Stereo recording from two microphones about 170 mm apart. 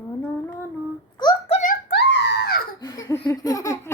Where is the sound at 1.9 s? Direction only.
85° left.